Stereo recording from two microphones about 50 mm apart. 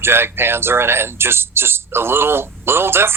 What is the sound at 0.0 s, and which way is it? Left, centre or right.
Speech, right.